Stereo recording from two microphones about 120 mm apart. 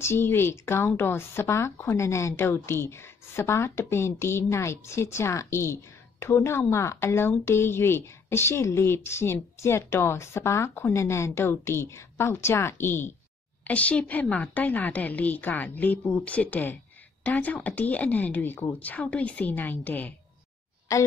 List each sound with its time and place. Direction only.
0.0 s a woman's voice: 20° left (ahead or behind)
20.9 s a woman's voice: 25° left (ahead or behind)